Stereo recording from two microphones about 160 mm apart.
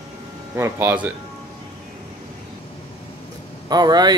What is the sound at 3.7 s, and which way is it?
Speech, 25° right (ahead or behind).